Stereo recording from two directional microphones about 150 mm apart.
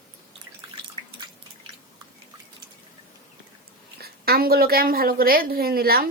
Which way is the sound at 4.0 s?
90° right.